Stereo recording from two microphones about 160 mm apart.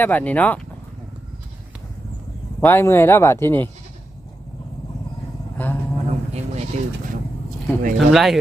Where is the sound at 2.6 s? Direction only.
15° left (ahead or behind).